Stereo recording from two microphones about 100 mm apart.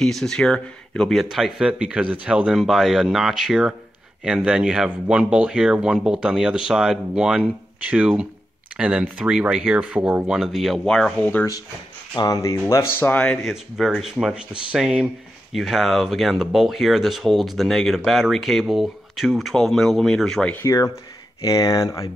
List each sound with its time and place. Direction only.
0.0 s speech: 5° left (ahead or behind)
12.2 s speech: 30° left (ahead or behind)
13.0 s speech: 15° left (ahead or behind)
13.5 s speech: centre (ahead or behind)
20.6 s speech: 30° left (ahead or behind)